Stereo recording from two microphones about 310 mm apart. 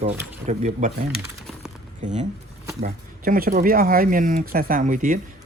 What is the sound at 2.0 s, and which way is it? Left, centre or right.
Speech, right.